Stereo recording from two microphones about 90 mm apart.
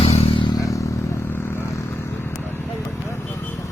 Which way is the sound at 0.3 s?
60° left (ahead or behind).